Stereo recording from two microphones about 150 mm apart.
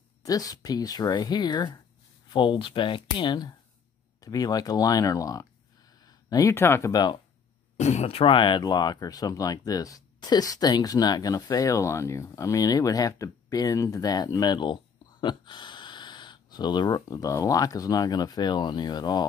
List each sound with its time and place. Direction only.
0.2 s speech: 25° left (ahead or behind)
7.7 s speech: 50° left (ahead or behind); by 19.2 s 30° left (ahead or behind)